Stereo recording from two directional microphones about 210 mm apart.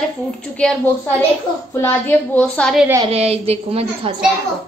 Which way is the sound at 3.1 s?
30° right (ahead or behind).